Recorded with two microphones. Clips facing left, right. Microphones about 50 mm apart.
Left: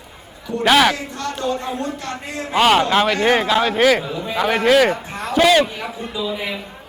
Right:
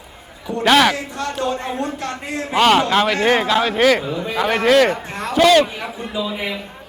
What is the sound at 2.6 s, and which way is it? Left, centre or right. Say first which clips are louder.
A man's voice: even; centre.